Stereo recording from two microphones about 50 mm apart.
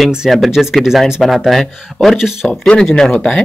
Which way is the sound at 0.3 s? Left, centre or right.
Centre.